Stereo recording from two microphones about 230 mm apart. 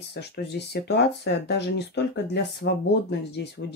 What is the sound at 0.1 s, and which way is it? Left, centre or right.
Speech, left.